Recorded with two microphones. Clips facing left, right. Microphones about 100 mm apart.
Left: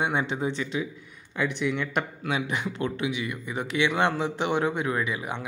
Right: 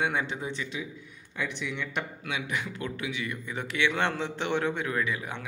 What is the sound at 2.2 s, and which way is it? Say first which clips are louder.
A man's voice: left 5 dB; 35° left (ahead or behind).